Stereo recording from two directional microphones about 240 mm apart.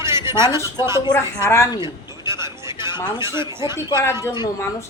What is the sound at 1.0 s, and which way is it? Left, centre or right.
Speech, centre.